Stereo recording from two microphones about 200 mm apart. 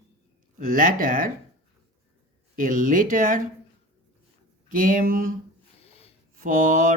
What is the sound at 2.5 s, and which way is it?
Speech, 40° right (ahead or behind).